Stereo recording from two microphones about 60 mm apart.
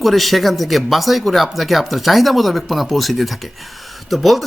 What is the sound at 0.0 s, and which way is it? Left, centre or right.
Speech, centre.